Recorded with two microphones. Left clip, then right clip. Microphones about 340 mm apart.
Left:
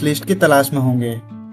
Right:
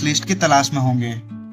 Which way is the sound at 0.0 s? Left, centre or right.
Centre.